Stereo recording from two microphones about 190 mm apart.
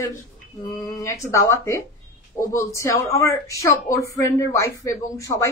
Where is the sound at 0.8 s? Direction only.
15° left (ahead or behind).